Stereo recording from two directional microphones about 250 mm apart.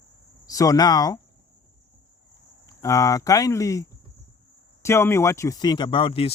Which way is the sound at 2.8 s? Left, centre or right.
Centre.